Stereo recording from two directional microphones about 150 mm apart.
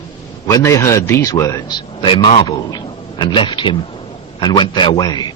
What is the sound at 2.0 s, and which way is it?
A man's voice, 35° left (ahead or behind).